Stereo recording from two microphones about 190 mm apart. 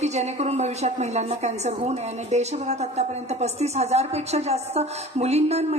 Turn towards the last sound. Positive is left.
turn(degrees=-35)  # may be behind; listen again after turning